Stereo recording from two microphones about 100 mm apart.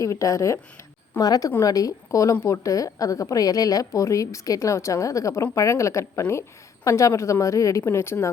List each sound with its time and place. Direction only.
0.0 s a woman's voice: 35° left (ahead or behind)